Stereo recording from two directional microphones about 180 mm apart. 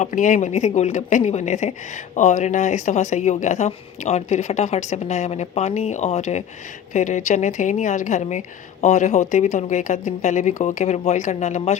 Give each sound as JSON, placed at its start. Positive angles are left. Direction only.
{"t": 0.0, "sound": "speech", "side_deg": 45}